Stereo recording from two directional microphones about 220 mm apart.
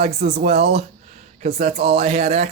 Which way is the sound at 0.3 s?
30° right (ahead or behind).